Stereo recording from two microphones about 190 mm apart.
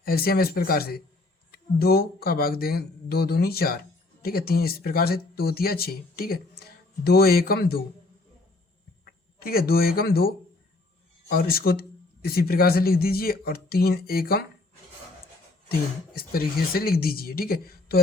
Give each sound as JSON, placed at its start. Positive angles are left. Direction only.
{"t": 0.0, "sound": "speech", "side_deg": 50}
{"t": 9.0, "sound": "speech", "side_deg": 50}
{"t": 16.1, "sound": "speech", "side_deg": 50}